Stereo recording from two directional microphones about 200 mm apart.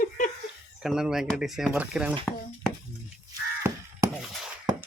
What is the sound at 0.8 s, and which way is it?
Speech, centre (ahead or behind).